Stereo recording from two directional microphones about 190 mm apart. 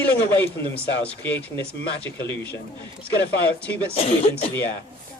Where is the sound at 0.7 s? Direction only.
10° left (ahead or behind).